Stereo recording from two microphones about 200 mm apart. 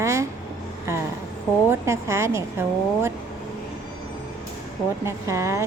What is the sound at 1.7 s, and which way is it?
Speech, 15° right (ahead or behind).